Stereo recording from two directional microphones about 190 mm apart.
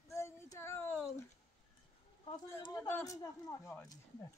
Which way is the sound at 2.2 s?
25° left (ahead or behind).